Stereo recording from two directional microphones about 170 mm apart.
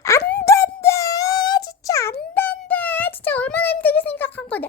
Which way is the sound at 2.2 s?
10° left (ahead or behind).